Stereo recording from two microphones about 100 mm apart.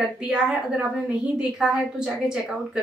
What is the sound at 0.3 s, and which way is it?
Speech, 10° right (ahead or behind).